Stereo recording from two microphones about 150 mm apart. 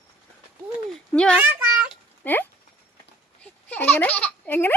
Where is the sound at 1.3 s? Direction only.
10° right (ahead or behind).